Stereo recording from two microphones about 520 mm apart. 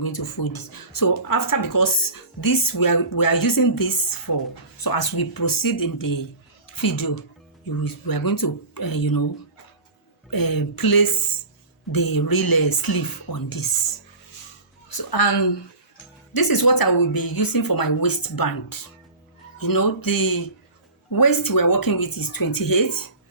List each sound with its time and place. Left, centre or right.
0.0 s a woman's voice: left
10.2 s speech: left
14.8 s a woman's voice: left